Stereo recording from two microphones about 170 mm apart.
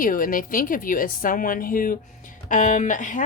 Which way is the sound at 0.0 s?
55° left (ahead or behind).